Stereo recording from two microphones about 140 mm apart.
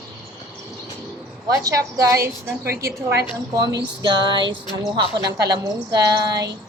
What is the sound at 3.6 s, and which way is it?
A woman's voice, 30° right (ahead or behind).